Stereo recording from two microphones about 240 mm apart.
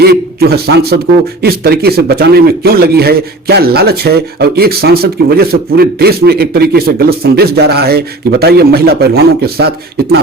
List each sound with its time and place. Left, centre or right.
0.0 s a man's voice: right